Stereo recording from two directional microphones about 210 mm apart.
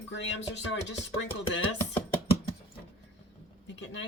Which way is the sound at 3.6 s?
55° left (ahead or behind).